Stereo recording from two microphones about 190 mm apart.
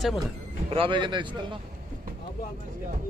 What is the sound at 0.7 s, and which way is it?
Speech, 25° right (ahead or behind).